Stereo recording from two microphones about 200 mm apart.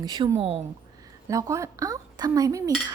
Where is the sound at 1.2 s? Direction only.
15° right (ahead or behind).